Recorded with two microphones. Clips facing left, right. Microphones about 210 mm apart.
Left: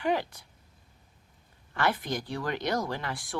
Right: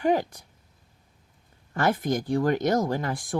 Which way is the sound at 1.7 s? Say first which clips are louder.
Right 5 dB; 45° right (ahead or behind).